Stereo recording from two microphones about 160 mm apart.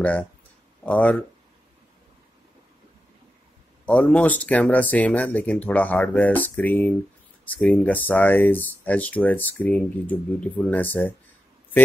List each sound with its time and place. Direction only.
0.0 s speech: 10° left (ahead or behind)
3.8 s speech: 10° left (ahead or behind)